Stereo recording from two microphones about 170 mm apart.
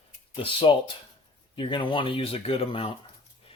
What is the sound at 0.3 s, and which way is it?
Speech, 30° left (ahead or behind).